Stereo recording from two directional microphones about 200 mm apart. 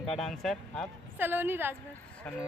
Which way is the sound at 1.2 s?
10° right (ahead or behind).